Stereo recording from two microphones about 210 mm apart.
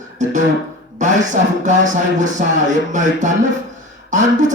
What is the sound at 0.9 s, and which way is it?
A man's voice, 35° right (ahead or behind).